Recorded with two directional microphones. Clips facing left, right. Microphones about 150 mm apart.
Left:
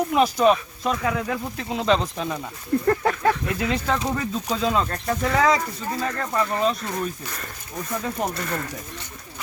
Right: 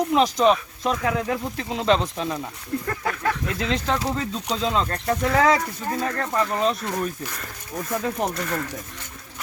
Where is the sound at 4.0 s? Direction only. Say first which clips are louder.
Even; 5° right (ahead or behind).